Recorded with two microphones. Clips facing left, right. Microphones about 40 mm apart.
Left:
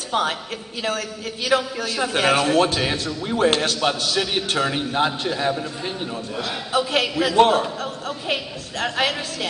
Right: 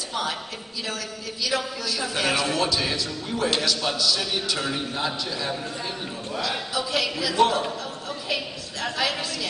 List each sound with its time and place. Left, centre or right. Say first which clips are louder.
0.1 s a woman's voice: left 7 dB; left
6.7 s a man's voice: left 9 dB; left